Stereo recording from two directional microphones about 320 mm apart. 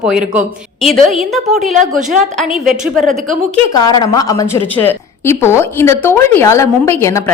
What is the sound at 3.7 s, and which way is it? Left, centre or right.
A woman's voice, centre.